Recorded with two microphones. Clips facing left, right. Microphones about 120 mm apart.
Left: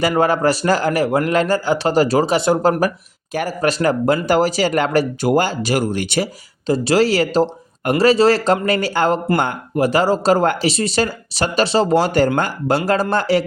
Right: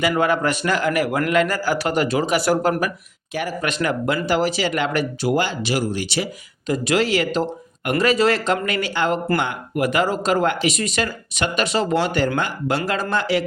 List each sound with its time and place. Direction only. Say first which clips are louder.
0.0 s speech: left 3 dB; 35° left (ahead or behind); by 6.2 s 55° left (ahead or behind)
6.7 s speech: left 4 dB; 30° left (ahead or behind)